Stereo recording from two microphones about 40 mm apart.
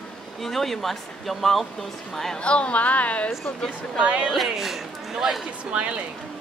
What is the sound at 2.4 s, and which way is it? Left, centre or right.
Speech, left.